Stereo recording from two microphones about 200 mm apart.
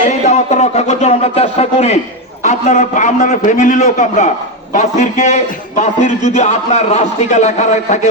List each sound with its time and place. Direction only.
0.3 s a man's voice: 35° left (ahead or behind)